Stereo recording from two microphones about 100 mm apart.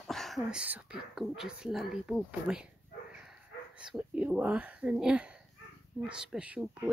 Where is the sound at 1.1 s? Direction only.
5° right (ahead or behind).